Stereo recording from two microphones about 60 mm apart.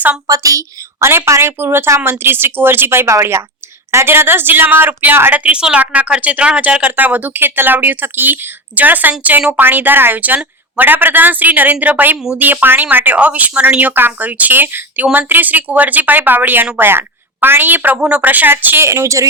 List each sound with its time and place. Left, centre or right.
0.3 s a woman's voice: right
0.9 s a woman's voice: right
3.1 s a woman's voice: right
5.4 s a woman's voice: right
18.8 s a woman's voice: right
19.0 s a woman's voice: right